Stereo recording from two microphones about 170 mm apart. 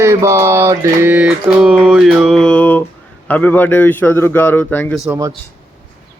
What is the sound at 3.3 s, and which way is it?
A man's voice, 10° left (ahead or behind).